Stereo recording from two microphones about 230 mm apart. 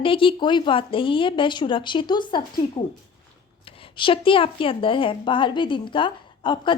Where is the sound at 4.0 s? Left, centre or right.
Left.